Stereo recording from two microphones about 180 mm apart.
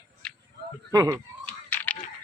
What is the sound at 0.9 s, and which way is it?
Speech, 20° right (ahead or behind).